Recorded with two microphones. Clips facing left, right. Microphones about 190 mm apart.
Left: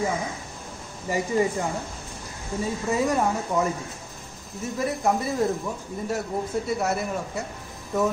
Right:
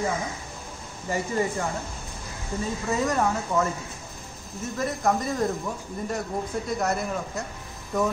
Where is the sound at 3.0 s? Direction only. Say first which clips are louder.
Left 1 dB; 10° left (ahead or behind).